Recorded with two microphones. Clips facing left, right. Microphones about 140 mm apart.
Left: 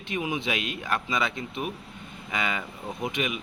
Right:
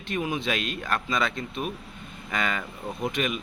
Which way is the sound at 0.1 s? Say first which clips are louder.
Right 1 dB; 15° left (ahead or behind).